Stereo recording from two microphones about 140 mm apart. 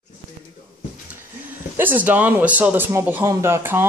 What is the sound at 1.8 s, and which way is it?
Speech, 10° right (ahead or behind).